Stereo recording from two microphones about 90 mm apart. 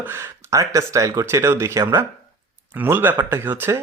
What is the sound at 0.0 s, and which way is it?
Speech, 25° right (ahead or behind).